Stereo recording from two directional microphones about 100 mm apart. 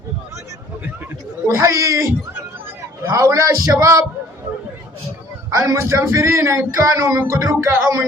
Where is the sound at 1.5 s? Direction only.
30° right (ahead or behind).